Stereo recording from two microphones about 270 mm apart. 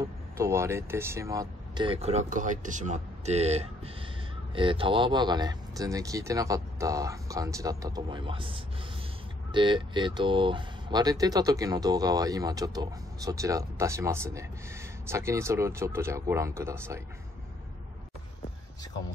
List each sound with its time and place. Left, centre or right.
0.4 s speech: centre